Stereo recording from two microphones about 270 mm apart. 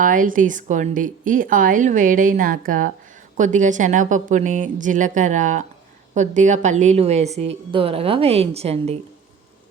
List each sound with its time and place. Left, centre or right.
0.0 s a woman's voice: right